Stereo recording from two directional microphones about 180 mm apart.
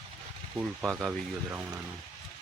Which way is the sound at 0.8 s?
5° right (ahead or behind).